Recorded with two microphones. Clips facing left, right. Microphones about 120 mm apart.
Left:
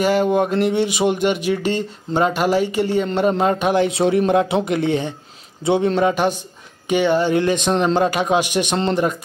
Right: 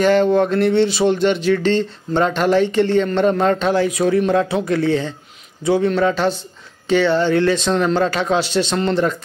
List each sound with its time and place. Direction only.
0.0 s speech: 10° left (ahead or behind)